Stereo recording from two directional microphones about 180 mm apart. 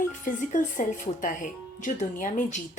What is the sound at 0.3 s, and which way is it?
Speech, 45° left (ahead or behind).